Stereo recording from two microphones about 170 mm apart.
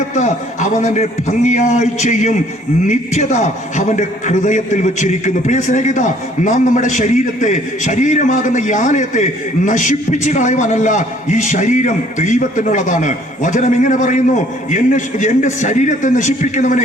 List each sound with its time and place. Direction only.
0.1 s a man's voice: 45° left (ahead or behind)